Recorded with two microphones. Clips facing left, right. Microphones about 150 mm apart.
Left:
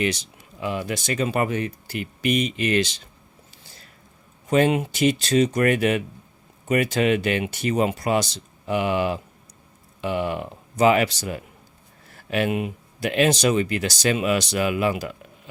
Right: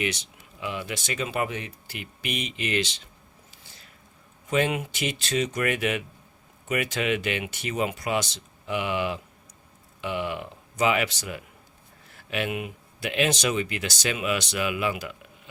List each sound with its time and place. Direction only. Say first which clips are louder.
0.0 s speech: left 5 dB; 35° left (ahead or behind)
4.4 s speech: left 6 dB; 35° left (ahead or behind)